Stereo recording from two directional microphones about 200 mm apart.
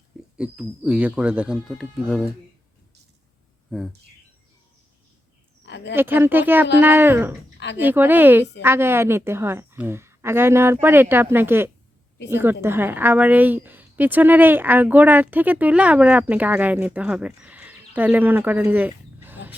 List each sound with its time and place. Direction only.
0.3 s speech: 5° right (ahead or behind)
5.6 s a sound: 60° left (ahead or behind)
5.9 s a woman's voice: 10° right (ahead or behind)